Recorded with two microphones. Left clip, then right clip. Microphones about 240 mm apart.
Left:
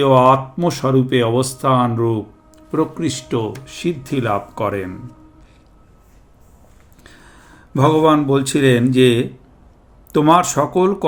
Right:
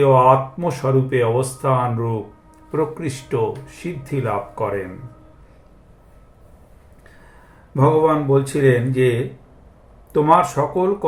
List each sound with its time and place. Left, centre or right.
0.0 s speech: left
7.7 s speech: left